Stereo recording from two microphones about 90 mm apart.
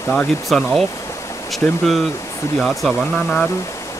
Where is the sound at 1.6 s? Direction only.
25° left (ahead or behind).